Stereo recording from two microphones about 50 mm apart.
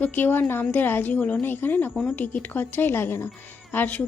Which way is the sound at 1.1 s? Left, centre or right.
Left.